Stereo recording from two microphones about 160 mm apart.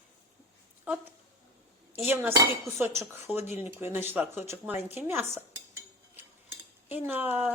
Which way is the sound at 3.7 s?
15° right (ahead or behind).